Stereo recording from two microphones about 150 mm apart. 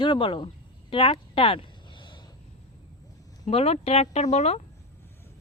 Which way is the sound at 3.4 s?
45° left (ahead or behind).